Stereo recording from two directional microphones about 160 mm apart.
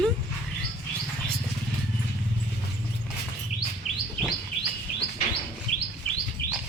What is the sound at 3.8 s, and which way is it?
Chirp, 45° left (ahead or behind).